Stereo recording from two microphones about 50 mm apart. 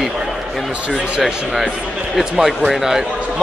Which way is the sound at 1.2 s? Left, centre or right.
Centre.